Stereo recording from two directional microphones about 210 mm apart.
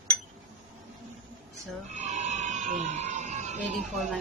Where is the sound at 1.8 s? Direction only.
35° right (ahead or behind).